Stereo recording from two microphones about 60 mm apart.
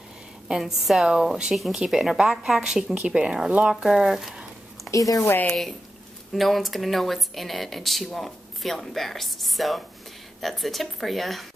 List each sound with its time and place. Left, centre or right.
0.5 s speech: centre
4.9 s a woman's voice: left
5.5 s speech: centre